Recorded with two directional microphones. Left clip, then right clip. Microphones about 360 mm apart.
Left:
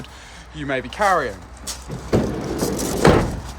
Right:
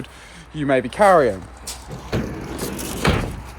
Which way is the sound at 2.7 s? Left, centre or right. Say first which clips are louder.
Left 6 dB; left.